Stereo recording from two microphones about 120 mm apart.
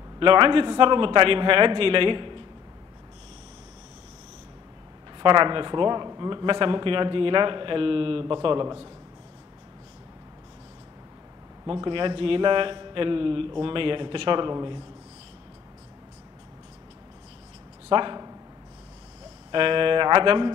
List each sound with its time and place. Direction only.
0.2 s speech: 45° right (ahead or behind)
5.2 s speech: 40° right (ahead or behind)
11.6 s speech: 45° right (ahead or behind)
17.8 s speech: 40° right (ahead or behind)
19.5 s speech: 45° right (ahead or behind)